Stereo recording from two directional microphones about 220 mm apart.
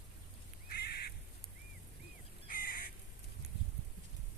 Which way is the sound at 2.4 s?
40° left (ahead or behind).